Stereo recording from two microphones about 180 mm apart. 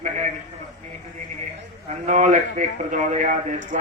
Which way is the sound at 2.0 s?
45° right (ahead or behind).